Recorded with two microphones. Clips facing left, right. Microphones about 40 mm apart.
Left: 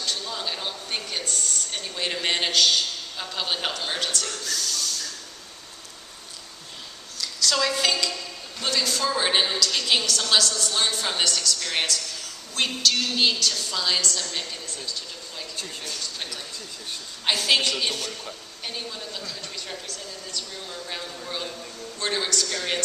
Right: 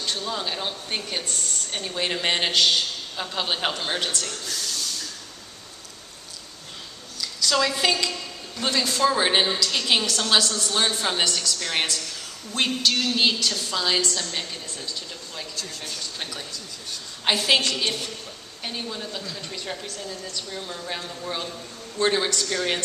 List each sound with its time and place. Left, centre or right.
0.0 s a sound: right
0.3 s a woman's voice: centre
4.2 s a sound: centre
7.2 s a woman's voice: centre
8.6 s a woman's voice: right
9.1 s a woman's voice: centre
10.0 s a woman's voice: right
13.4 s a woman's voice: right
17.3 s a woman's voice: centre
18.6 s a woman's voice: centre